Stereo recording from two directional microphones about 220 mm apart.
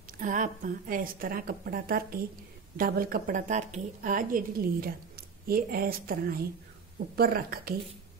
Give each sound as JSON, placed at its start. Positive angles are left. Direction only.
{"t": 0.2, "sound": "a woman's voice", "side_deg": -35}